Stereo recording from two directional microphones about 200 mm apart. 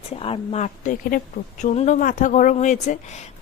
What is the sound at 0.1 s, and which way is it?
A woman's voice, 30° left (ahead or behind).